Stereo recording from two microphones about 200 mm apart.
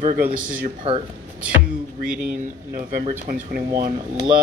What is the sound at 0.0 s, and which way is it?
Speech, 45° right (ahead or behind).